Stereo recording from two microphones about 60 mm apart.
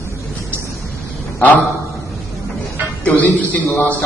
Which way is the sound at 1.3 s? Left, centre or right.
Left.